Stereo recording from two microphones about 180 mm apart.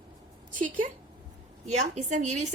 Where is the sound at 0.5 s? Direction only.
45° right (ahead or behind).